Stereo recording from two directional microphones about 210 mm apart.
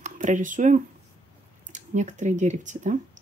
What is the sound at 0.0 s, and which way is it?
Speech, 35° right (ahead or behind).